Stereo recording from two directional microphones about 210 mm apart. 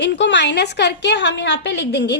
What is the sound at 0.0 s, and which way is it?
A woman's voice, 55° left (ahead or behind).